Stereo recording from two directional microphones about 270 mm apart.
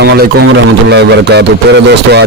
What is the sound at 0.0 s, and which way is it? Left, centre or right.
A man's voice, right.